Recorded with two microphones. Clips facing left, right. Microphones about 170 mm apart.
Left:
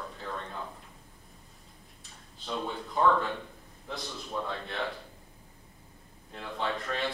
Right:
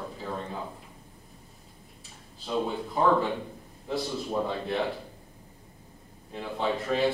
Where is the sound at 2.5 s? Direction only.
5° right (ahead or behind).